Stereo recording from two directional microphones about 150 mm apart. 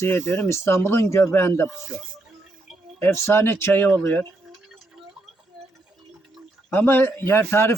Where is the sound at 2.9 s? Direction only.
15° left (ahead or behind).